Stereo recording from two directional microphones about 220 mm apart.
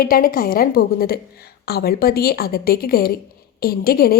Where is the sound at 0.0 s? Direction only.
40° left (ahead or behind).